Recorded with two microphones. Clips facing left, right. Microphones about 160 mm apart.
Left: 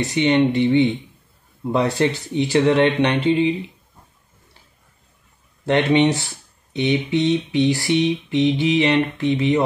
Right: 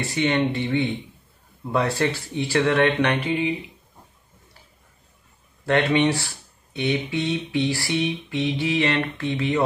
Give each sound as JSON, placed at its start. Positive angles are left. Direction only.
{"t": 0.0, "sound": "speech", "side_deg": 20}
{"t": 5.7, "sound": "speech", "side_deg": 20}